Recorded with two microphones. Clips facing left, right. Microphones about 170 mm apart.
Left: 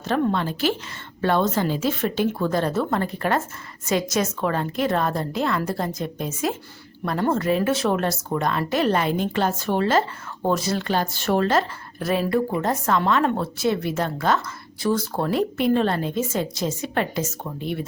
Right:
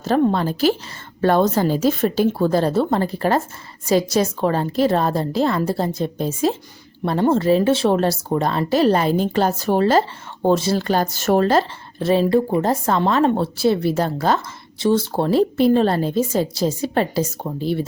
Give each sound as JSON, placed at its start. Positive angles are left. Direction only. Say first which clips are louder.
{"t": 0.0, "sound": "speech", "louder": "right 5 dB", "side_deg": -35}